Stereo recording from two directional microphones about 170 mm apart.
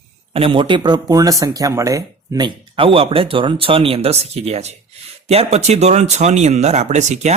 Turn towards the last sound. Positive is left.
turn(degrees=-40)  # may be behind; listen again after turning